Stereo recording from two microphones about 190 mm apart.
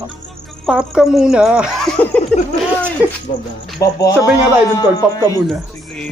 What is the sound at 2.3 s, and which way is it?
Speech, 5° left (ahead or behind).